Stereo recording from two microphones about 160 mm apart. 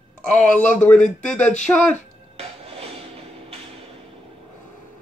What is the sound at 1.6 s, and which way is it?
Speech, 5° left (ahead or behind).